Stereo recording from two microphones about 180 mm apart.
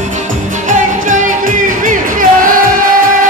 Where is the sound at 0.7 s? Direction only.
45° right (ahead or behind).